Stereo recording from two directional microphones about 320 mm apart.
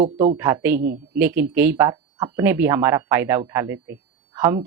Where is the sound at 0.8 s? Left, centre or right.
Right.